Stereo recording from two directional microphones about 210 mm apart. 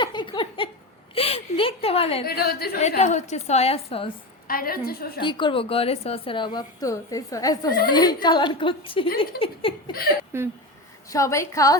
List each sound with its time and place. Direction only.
0.0 s a sound: 20° left (ahead or behind)
2.2 s a woman's voice: 50° left (ahead or behind)
3.0 s a woman's voice: 35° left (ahead or behind)
4.4 s a woman's voice: 45° left (ahead or behind)
5.2 s a woman's voice: 20° left (ahead or behind)
10.3 s speech: 10° right (ahead or behind)
11.1 s a woman's voice: 15° left (ahead or behind)